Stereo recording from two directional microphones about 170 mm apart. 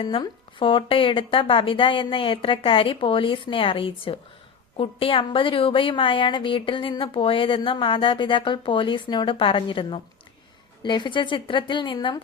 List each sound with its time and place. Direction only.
0.0 s a woman's voice: 30° left (ahead or behind)